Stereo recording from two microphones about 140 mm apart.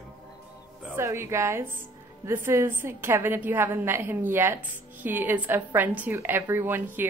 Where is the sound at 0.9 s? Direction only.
20° right (ahead or behind).